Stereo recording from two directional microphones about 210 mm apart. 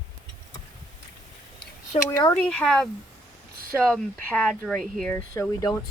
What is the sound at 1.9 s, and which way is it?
Speech, 15° left (ahead or behind).